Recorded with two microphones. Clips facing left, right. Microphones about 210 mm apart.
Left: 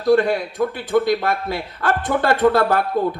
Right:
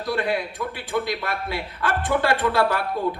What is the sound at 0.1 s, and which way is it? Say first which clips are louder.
A man's voice: left 9 dB; 45° left (ahead or behind).